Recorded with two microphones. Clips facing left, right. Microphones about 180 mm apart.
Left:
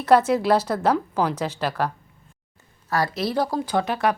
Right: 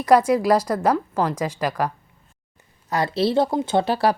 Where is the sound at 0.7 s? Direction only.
10° right (ahead or behind).